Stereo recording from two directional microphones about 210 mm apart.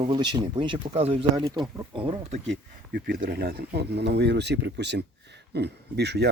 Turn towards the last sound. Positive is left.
turn(degrees=-50)  # may be behind; listen again after turning